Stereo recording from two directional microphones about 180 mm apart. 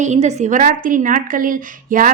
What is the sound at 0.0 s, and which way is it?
A woman's voice, 40° right (ahead or behind).